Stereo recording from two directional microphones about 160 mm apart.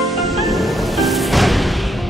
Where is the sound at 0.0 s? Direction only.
Centre (ahead or behind).